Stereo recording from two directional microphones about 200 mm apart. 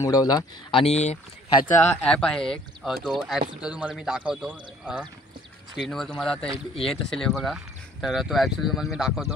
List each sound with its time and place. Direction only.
0.0 s speech: 20° left (ahead or behind)
2.0 s speech: 5° left (ahead or behind)